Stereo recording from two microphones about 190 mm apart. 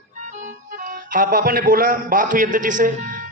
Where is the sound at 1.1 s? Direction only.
45° right (ahead or behind).